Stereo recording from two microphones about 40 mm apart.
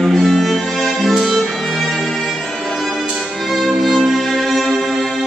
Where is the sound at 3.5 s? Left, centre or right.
Centre.